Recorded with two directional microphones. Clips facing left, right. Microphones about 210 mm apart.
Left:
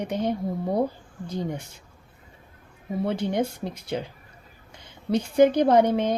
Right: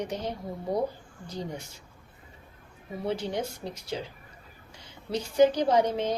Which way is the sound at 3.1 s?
60° left (ahead or behind).